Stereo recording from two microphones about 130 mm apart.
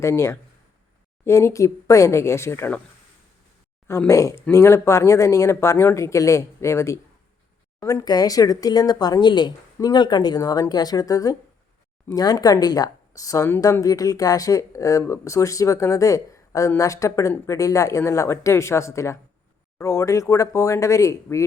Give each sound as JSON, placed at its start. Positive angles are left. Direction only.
{"t": 0.0, "sound": "speech", "side_deg": 20}
{"t": 3.8, "sound": "speech", "side_deg": 20}